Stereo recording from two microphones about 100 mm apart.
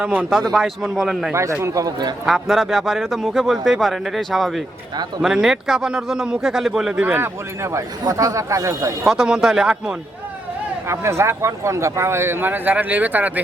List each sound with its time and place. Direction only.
0.0 s a man's voice: 15° right (ahead or behind)
0.3 s speech: 5° left (ahead or behind)
1.3 s a man's voice: 25° right (ahead or behind)
2.2 s speech: centre (ahead or behind)
7.0 s speech: 25° right (ahead or behind)
9.0 s speech: 5° right (ahead or behind)
10.8 s speech: 30° right (ahead or behind)